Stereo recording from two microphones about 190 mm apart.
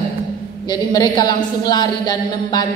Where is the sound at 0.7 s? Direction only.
20° left (ahead or behind).